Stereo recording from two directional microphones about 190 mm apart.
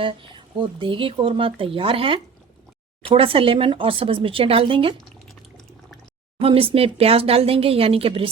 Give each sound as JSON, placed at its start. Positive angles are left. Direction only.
{"t": 0.0, "sound": "speech", "side_deg": -25}
{"t": 6.4, "sound": "speech", "side_deg": -30}